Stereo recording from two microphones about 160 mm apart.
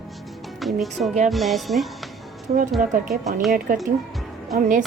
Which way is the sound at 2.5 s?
50° right (ahead or behind).